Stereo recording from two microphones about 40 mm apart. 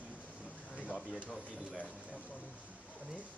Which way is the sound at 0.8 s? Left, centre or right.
Left.